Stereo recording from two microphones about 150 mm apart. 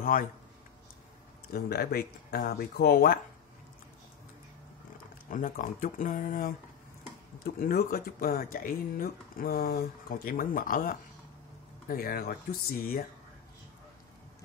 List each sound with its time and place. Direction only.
0.0 s speech: 65° left (ahead or behind)
1.5 s speech: 90° left; by 3.2 s 70° left (ahead or behind)
5.3 s speech: 60° left (ahead or behind)
7.4 s speech: 80° left
11.9 s speech: 80° left